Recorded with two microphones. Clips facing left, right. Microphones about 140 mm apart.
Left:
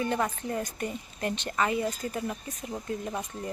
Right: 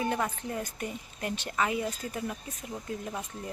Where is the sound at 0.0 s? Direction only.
5° right (ahead or behind).